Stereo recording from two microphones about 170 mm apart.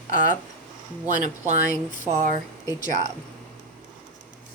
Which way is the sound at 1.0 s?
50° right (ahead or behind).